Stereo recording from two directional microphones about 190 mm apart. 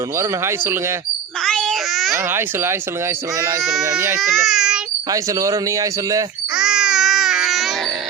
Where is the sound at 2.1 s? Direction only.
10° right (ahead or behind).